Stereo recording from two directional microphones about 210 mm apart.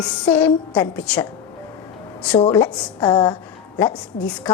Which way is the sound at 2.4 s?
20° left (ahead or behind).